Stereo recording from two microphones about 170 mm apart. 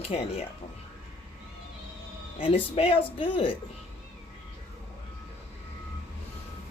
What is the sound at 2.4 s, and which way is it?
Speech, 30° left (ahead or behind).